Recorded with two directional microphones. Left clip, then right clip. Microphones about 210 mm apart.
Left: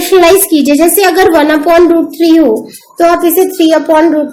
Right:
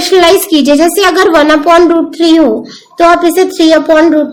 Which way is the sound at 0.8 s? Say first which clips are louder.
Even; 35° right (ahead or behind).